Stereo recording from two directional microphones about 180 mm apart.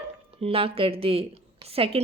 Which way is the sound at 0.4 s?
30° right (ahead or behind).